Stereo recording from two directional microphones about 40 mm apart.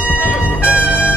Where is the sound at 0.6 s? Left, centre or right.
Right.